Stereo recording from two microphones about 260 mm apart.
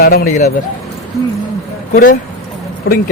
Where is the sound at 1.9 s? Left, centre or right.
Left.